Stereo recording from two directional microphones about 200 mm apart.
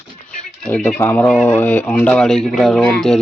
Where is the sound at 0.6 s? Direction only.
5° left (ahead or behind).